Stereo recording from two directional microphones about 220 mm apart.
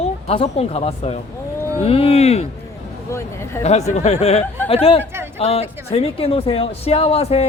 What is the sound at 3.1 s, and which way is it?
Speech, 10° left (ahead or behind).